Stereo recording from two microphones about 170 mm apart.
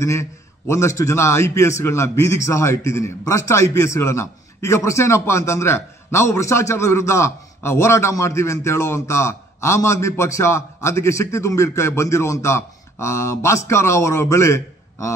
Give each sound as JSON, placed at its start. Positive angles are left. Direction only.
{"t": 0.0, "sound": "a man's voice", "side_deg": 15}